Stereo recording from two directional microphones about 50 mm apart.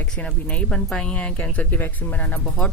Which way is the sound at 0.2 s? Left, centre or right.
Left.